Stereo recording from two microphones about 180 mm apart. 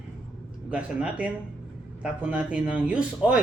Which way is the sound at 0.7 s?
5° right (ahead or behind).